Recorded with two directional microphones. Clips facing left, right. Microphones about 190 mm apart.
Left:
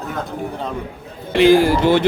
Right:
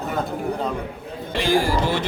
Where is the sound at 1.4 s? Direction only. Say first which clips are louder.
Left 8 dB; 65° left (ahead or behind).